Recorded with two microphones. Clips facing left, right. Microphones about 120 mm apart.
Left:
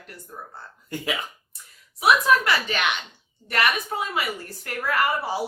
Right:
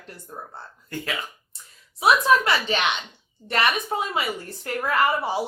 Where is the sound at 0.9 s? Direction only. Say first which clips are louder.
Even; 15° left (ahead or behind).